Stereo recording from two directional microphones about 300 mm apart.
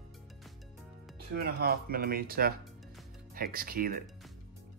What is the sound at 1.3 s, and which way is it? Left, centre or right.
Speech, right.